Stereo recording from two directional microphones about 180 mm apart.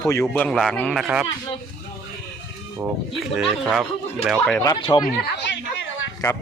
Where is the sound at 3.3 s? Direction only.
5° right (ahead or behind).